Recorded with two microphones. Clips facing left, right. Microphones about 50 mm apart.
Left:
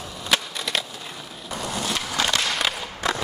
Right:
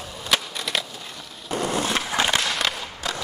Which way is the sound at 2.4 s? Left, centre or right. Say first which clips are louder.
Even; centre.